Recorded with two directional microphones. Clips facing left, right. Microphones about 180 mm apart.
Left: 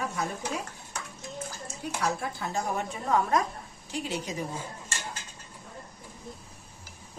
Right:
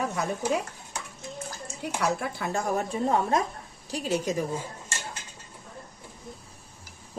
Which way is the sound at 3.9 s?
45° right (ahead or behind).